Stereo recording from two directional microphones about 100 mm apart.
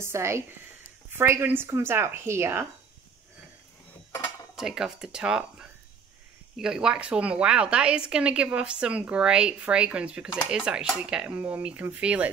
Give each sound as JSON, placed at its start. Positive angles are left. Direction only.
{"t": 0.0, "sound": "a woman's voice", "side_deg": -25}
{"t": 4.6, "sound": "speech", "side_deg": -5}